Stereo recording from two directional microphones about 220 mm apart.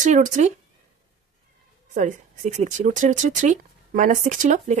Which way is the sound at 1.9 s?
35° right (ahead or behind).